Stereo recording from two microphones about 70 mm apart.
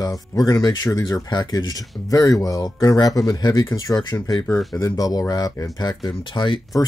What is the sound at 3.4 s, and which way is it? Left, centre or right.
Speech, left.